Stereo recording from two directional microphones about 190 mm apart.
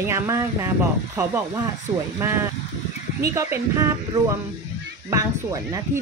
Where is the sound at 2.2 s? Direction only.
10° right (ahead or behind).